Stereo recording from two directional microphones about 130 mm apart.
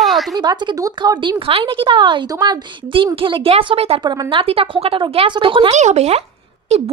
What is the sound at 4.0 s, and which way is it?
Speech, 35° right (ahead or behind).